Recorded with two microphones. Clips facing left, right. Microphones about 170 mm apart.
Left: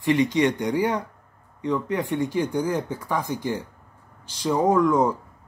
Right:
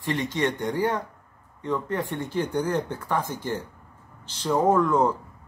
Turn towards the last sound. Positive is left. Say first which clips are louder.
# left 1 dB
turn(degrees=10)  # may be behind; listen again after turning